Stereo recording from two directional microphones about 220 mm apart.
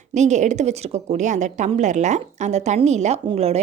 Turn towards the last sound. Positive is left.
turn(degrees=-30)  # may be behind; listen again after turning